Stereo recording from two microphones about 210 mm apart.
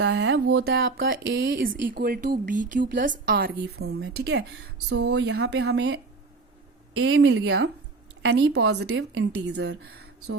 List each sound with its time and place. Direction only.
0.0 s a woman's voice: 60° right (ahead or behind)
1.7 s a woman's voice: 45° right (ahead or behind); by 6.0 s 60° right (ahead or behind)
7.0 s a woman's voice: 60° right (ahead or behind)